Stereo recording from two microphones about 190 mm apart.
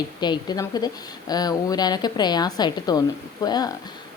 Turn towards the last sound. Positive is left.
turn(degrees=20)  # may be behind; listen again after turning